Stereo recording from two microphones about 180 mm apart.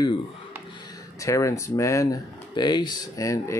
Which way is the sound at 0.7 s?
20° left (ahead or behind).